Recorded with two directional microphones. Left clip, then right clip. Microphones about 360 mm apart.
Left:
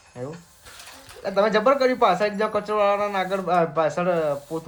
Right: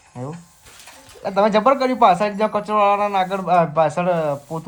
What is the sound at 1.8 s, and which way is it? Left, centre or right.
Speech, centre.